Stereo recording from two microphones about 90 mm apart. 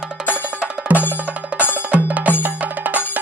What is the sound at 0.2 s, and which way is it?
Music, 5° right (ahead or behind).